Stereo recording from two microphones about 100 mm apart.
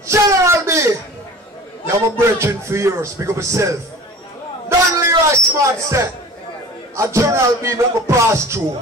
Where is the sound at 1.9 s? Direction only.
25° right (ahead or behind).